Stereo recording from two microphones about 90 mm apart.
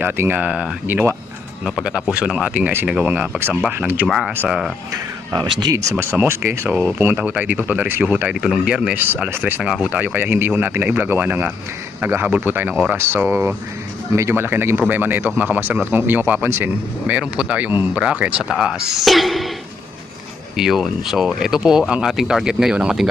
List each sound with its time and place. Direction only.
0.0 s a man's voice: 20° right (ahead or behind)
0.9 s a man's voice: 25° right (ahead or behind)
1.6 s a man's voice: 5° right (ahead or behind)
4.4 s speech: 5° right (ahead or behind)
4.9 s speech: 45° right (ahead or behind)
5.5 s speech: 55° right (ahead or behind)
5.7 s a man's voice: 30° right (ahead or behind)
6.7 s speech: 15° right (ahead or behind)
9.3 s a man's voice: 20° right (ahead or behind)
13.0 s a man's voice: 25° right (ahead or behind)
18.5 s speech: 5° right (ahead or behind)
20.6 s speech: 5° right (ahead or behind)